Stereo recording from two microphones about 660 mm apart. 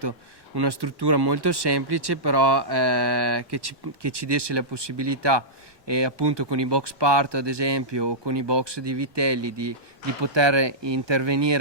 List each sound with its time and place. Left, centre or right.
0.5 s speech: right